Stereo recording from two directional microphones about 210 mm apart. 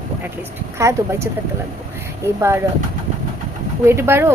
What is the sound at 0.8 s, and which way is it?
Speech, 15° right (ahead or behind).